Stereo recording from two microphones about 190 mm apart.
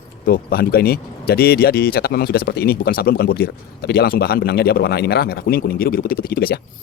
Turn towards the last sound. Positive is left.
turn(degrees=55)  # may be behind; listen again after turning